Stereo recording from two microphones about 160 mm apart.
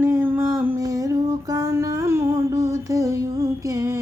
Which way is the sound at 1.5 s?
20° right (ahead or behind).